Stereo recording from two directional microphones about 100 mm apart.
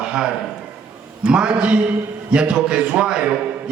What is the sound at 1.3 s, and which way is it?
A man's voice, 10° right (ahead or behind).